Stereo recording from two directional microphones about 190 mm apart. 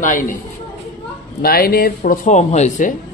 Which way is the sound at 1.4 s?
50° left (ahead or behind).